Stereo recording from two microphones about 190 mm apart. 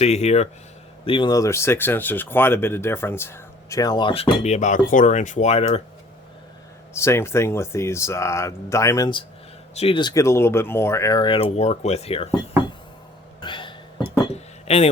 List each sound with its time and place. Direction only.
0.0 s speech: 35° left (ahead or behind)
6.9 s speech: 15° left (ahead or behind); by 12.4 s 30° left (ahead or behind)
13.4 s a sound: 25° left (ahead or behind)